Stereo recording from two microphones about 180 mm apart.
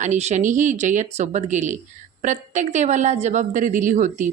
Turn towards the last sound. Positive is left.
turn(degrees=-45)  # may be behind; listen again after turning